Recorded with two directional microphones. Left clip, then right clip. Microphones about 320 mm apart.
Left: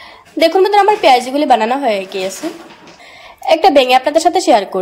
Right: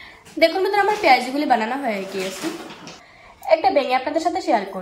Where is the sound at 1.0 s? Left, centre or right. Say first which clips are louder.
Left 6 dB; left.